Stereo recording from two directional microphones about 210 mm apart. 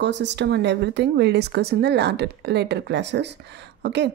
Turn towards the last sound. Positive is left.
turn(degrees=-55)  # may be behind; listen again after turning